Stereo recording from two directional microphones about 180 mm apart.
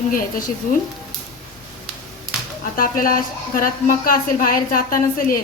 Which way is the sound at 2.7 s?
50° left (ahead or behind).